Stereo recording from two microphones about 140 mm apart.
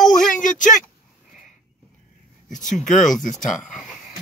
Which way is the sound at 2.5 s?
65° left (ahead or behind).